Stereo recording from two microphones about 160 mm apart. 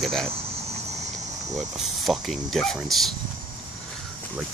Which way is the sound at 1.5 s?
Centre (ahead or behind).